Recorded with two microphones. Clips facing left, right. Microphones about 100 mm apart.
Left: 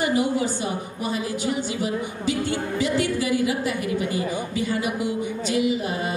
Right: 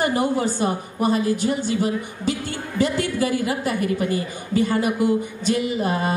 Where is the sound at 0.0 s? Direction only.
45° right (ahead or behind).